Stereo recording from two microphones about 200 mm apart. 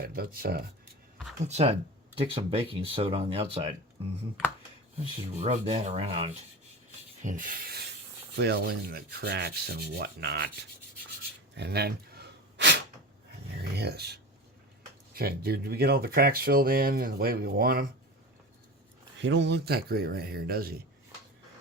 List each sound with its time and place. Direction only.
0.0 s speech: 45° right (ahead or behind)
1.5 s rub: 35° right (ahead or behind)
2.1 s speech: 25° right (ahead or behind)
5.4 s rub: 35° right (ahead or behind)
7.2 s a sound: 40° right (ahead or behind)
8.4 s speech: 55° right (ahead or behind)
11.5 s a sound: 55° right (ahead or behind)
13.6 s speech: 55° right (ahead or behind)
19.2 s speech: 60° right (ahead or behind)